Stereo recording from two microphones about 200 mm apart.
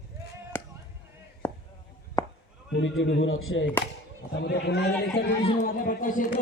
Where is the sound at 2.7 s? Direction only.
70° left (ahead or behind).